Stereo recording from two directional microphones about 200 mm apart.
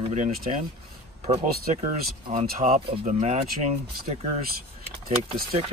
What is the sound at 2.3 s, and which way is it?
Speech, 35° right (ahead or behind).